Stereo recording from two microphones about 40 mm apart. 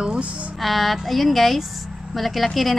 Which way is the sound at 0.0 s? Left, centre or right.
Right.